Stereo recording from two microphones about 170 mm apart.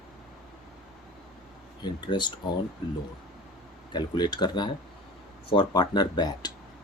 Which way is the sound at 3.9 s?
25° left (ahead or behind).